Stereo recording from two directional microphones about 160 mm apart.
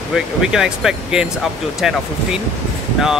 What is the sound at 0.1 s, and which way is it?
Speech, 5° right (ahead or behind).